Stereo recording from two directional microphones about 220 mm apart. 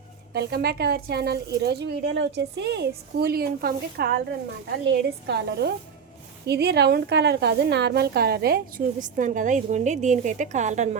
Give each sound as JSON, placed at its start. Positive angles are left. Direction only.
{"t": 0.3, "sound": "a woman's voice", "side_deg": -45}